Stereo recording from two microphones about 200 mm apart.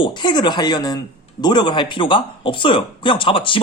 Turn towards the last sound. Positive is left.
turn(degrees=25)  # may be behind; listen again after turning